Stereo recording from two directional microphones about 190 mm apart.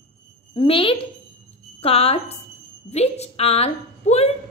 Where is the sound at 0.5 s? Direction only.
30° left (ahead or behind).